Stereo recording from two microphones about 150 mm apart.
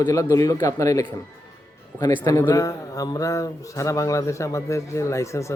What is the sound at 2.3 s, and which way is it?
Speech, 20° left (ahead or behind).